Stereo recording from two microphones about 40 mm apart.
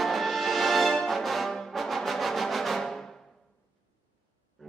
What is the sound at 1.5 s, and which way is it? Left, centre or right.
Brass instrument, centre.